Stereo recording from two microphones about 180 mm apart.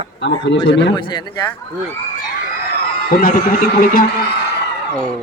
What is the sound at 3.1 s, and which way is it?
Speech, 50° left (ahead or behind).